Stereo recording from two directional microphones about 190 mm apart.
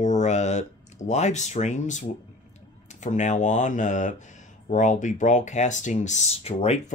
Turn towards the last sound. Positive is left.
turn(degrees=35)  # may be behind; listen again after turning